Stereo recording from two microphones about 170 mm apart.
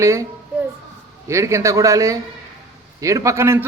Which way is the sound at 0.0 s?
15° right (ahead or behind).